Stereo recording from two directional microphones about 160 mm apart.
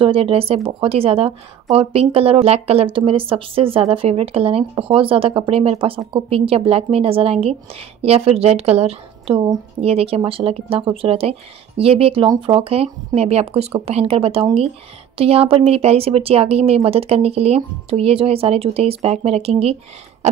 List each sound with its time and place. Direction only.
0.0 s speech: 35° right (ahead or behind)